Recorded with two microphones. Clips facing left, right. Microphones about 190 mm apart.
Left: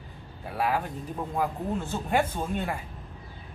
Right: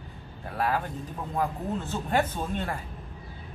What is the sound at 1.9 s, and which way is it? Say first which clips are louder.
Speech: even; 10° left (ahead or behind).